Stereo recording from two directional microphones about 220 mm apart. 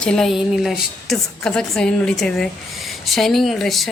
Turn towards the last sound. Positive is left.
turn(degrees=0)  # may be behind; listen again after turning